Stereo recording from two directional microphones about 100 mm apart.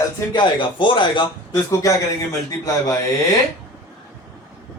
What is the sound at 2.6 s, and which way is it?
Speech, 35° left (ahead or behind).